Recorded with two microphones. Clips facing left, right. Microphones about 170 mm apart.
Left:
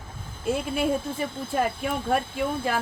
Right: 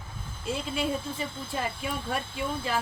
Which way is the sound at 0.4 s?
55° left (ahead or behind).